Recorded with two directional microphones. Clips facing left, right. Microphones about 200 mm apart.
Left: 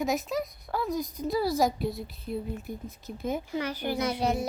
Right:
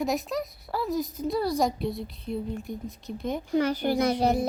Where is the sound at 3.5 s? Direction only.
45° right (ahead or behind).